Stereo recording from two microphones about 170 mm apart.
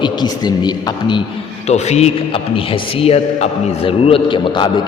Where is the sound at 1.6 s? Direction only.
40° left (ahead or behind).